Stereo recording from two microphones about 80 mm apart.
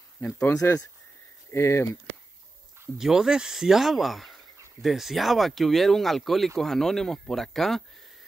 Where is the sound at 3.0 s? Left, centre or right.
Centre.